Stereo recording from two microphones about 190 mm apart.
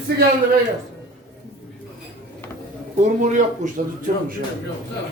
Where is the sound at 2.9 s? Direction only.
40° right (ahead or behind).